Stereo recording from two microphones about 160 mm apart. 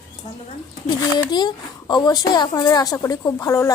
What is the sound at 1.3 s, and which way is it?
Speech, 25° left (ahead or behind).